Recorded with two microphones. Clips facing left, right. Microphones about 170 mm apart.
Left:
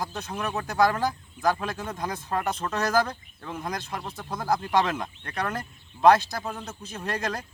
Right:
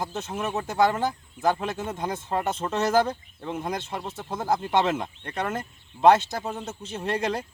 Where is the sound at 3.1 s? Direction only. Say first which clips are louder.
Right 5 dB; 10° right (ahead or behind).